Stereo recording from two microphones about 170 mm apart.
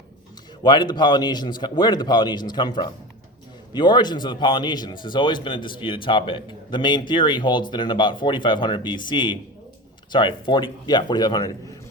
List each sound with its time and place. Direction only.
0.6 s a man's voice: 25° left (ahead or behind)